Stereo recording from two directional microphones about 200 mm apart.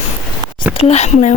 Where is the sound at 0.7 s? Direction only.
30° left (ahead or behind).